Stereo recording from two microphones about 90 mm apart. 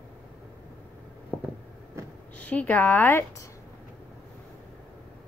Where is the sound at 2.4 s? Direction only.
15° left (ahead or behind).